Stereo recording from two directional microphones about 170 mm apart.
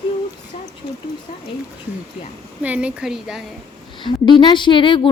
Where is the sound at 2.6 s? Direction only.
5° right (ahead or behind).